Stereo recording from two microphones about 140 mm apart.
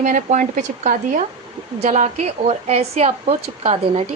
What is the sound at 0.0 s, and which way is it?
Speech, 65° right (ahead or behind).